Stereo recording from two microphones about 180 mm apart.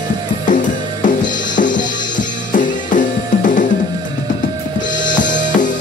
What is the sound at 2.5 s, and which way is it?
Drum kit, 45° left (ahead or behind).